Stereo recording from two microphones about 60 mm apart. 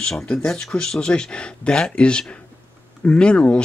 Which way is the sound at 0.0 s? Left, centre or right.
Centre.